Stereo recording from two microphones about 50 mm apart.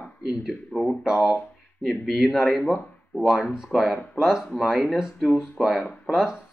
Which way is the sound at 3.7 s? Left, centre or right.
Left.